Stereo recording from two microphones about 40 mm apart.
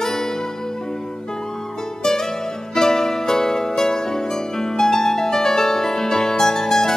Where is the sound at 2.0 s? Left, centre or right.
Centre.